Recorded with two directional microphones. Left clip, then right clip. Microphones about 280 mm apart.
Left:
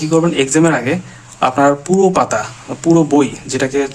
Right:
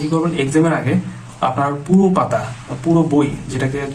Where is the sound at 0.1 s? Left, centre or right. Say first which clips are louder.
Left 5 dB; left.